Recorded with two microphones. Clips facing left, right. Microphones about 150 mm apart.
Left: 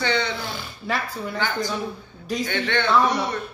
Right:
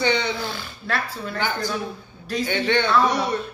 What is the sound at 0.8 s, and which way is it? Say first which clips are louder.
Speech: even; 15° left (ahead or behind).